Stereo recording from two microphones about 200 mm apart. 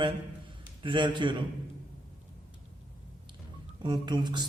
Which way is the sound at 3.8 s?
20° right (ahead or behind).